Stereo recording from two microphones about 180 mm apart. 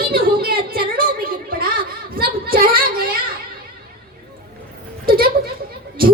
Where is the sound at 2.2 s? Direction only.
55° right (ahead or behind).